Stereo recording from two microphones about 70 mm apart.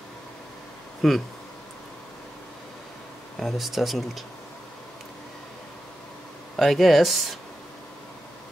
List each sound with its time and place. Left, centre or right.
1.0 s speech: centre
3.3 s speech: centre
6.5 s speech: centre